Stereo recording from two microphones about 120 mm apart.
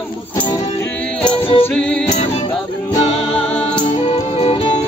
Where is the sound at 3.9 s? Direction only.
60° left (ahead or behind).